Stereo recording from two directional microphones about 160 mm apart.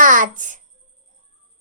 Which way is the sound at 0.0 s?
55° right (ahead or behind).